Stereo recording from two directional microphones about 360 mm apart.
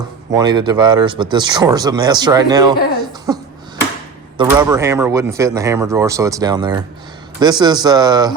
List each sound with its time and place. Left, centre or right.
0.3 s speech: centre
3.3 s a sound: centre
4.4 s speech: centre